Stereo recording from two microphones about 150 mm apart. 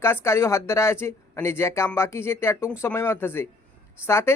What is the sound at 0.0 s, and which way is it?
Speech, 15° left (ahead or behind).